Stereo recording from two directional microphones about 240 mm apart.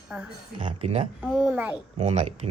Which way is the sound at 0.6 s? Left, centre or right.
Right.